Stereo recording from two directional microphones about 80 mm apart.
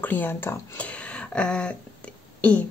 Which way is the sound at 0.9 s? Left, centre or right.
Centre.